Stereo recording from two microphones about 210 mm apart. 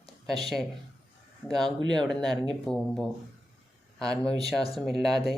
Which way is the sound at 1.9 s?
5° left (ahead or behind).